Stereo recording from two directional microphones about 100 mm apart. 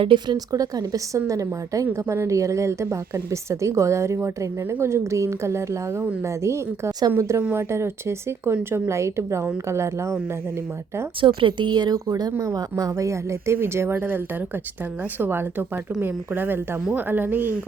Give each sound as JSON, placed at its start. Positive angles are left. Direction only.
{"t": 0.0, "sound": "speech", "side_deg": -55}
{"t": 0.3, "sound": "a woman's voice", "side_deg": -35}
{"t": 11.2, "sound": "a woman's voice", "side_deg": -60}
{"t": 15.2, "sound": "a woman's voice", "side_deg": -20}